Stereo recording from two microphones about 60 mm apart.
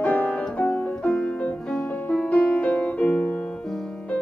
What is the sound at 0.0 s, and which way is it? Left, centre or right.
Music, left.